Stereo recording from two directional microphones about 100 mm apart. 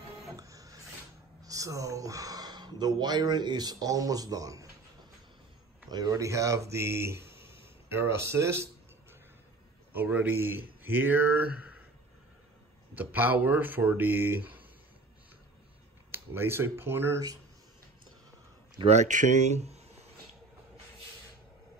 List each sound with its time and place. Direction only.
0.4 s music: 35° right (ahead or behind)
1.4 s speech: 35° right (ahead or behind)
5.9 s speech: 40° right (ahead or behind)
9.9 s speech: 20° right (ahead or behind)
12.9 s speech: 15° right (ahead or behind)
16.1 s speech: 20° right (ahead or behind)
19.5 s a sound: 90° right